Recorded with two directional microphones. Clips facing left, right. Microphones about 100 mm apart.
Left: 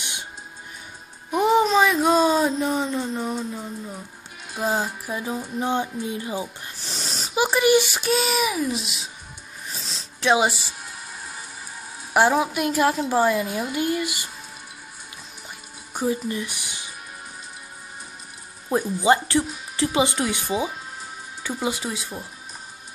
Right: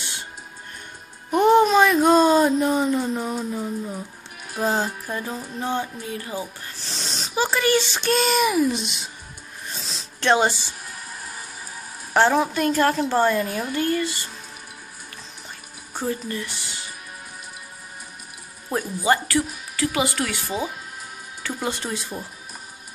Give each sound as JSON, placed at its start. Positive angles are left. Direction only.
{"t": 0.0, "sound": "music", "side_deg": 15}
{"t": 1.3, "sound": "a child's voice", "side_deg": 0}
{"t": 9.7, "sound": "a sound", "side_deg": 0}
{"t": 12.1, "sound": "a woman's voice", "side_deg": 10}
{"t": 15.9, "sound": "music", "side_deg": 15}
{"t": 18.9, "sound": "a child's voice", "side_deg": 25}